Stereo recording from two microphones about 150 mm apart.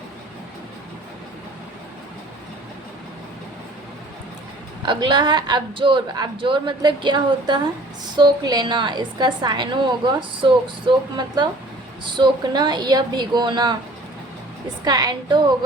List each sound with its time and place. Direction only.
4.8 s a woman's voice: 30° right (ahead or behind)
14.8 s a woman's voice: 25° right (ahead or behind)